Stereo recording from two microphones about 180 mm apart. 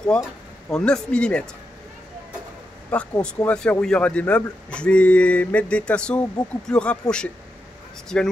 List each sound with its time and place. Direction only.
0.0 s speech: 5° left (ahead or behind)
2.9 s speech: 5° left (ahead or behind)